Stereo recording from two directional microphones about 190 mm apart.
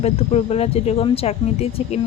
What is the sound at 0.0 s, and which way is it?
Speech, 35° left (ahead or behind).